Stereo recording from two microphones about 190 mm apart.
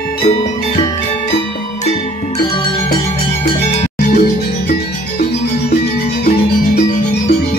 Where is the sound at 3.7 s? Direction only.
45° left (ahead or behind).